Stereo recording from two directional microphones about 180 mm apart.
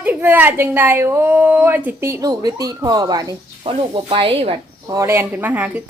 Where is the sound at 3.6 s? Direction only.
30° right (ahead or behind).